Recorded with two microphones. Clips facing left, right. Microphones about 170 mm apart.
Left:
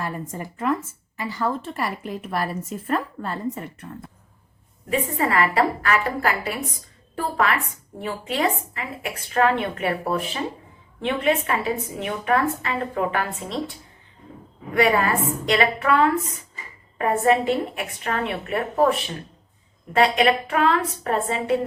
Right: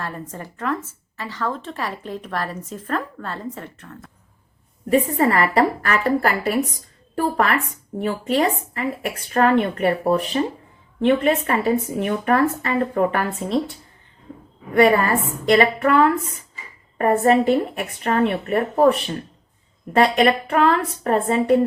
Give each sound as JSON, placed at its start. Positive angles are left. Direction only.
{"t": 0.0, "sound": "a woman's voice", "side_deg": 10}
{"t": 4.9, "sound": "speech", "side_deg": -40}
{"t": 14.8, "sound": "speech", "side_deg": -45}
{"t": 19.9, "sound": "speech", "side_deg": -40}